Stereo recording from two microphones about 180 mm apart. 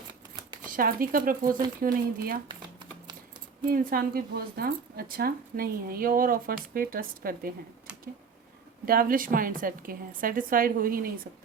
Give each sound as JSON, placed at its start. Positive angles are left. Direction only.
{"t": 0.7, "sound": "a woman's voice", "side_deg": -55}
{"t": 2.5, "sound": "a sound", "side_deg": -25}
{"t": 3.7, "sound": "a woman's voice", "side_deg": -55}
{"t": 8.9, "sound": "a woman's voice", "side_deg": -55}